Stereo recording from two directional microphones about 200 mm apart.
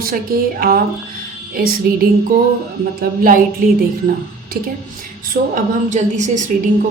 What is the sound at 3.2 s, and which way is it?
A woman's voice, 45° right (ahead or behind).